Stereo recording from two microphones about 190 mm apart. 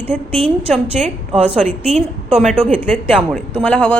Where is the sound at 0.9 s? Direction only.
40° right (ahead or behind).